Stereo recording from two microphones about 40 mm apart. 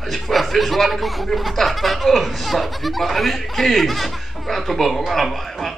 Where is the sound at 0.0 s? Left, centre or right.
Centre.